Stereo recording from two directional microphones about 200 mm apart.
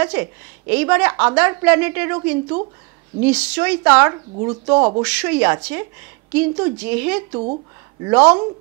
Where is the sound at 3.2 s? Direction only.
5° right (ahead or behind).